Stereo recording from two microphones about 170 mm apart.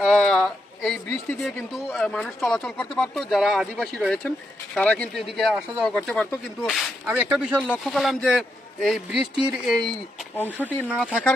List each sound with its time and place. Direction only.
0.0 s speech: centre (ahead or behind)
10.3 s speech: 10° left (ahead or behind)